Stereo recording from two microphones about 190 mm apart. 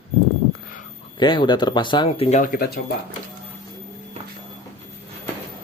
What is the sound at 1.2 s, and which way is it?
Speech, 25° left (ahead or behind).